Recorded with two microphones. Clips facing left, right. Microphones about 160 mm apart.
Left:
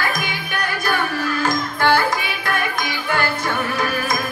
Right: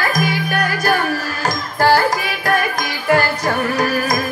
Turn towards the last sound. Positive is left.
turn(degrees=-40)  # may be behind; listen again after turning